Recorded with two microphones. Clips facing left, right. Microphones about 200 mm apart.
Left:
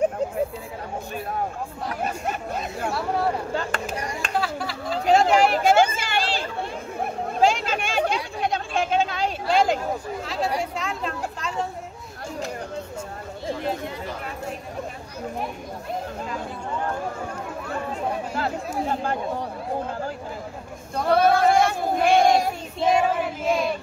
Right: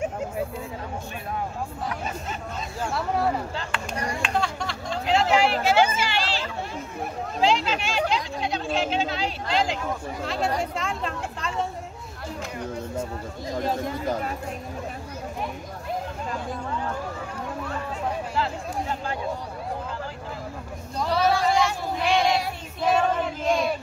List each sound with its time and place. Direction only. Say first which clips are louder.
2.2 s speech: left 5 dB; 60° left (ahead or behind)
3.9 s speech: even; 30° right (ahead or behind)
4.3 s a sound: left 4 dB; 5° left (ahead or behind)
5.0 s a sound: left 3 dB; 45° left (ahead or behind)
7.3 s chatter: left 1 dB; 50° left (ahead or behind)
10.2 s speech: right 1 dB; centre (ahead or behind)
13.6 s speech: right 6 dB; 40° right (ahead or behind)
18.3 s speech: left 1 dB; 50° left (ahead or behind)
20.9 s child singing: left 4 dB; 55° left (ahead or behind)
22.8 s child singing: left 2 dB; 15° left (ahead or behind)
23.0 s child singing: left 1 dB; 5° left (ahead or behind)